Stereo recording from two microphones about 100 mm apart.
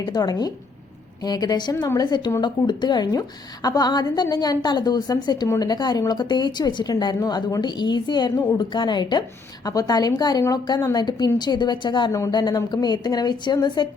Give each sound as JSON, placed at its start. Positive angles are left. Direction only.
{"t": 0.0, "sound": "a woman's voice", "side_deg": 40}